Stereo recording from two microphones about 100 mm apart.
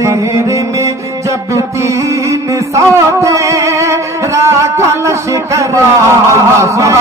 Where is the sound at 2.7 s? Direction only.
30° right (ahead or behind).